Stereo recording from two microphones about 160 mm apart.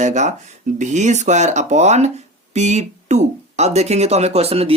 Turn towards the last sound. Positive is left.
turn(degrees=-40)  # may be behind; listen again after turning